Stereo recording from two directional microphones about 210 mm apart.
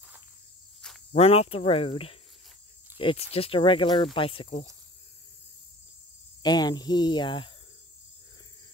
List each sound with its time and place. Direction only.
1.1 s speech: 30° left (ahead or behind)
6.4 s speech: 20° left (ahead or behind)